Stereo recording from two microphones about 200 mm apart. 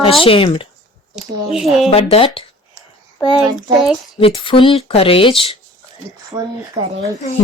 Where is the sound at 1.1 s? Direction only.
Centre (ahead or behind).